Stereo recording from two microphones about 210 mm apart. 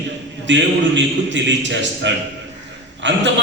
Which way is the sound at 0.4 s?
60° right (ahead or behind).